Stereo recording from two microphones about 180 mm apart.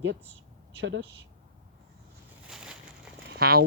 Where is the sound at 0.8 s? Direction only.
85° right.